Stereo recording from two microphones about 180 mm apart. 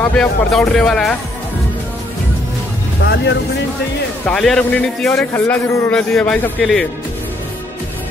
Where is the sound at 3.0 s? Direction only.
65° left (ahead or behind).